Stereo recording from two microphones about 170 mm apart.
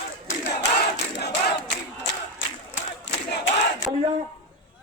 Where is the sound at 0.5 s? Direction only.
80° left.